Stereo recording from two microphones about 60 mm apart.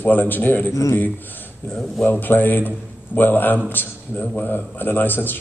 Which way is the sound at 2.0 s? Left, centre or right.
Left.